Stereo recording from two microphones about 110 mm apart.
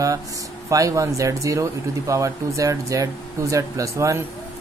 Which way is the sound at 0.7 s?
30° right (ahead or behind).